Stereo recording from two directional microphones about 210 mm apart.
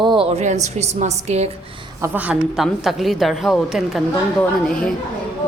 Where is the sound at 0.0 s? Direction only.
25° right (ahead or behind).